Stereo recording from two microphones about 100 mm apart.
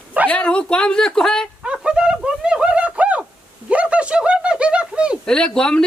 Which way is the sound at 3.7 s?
15° right (ahead or behind).